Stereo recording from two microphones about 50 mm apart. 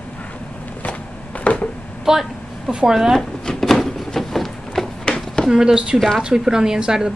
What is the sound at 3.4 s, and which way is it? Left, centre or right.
Wood, centre.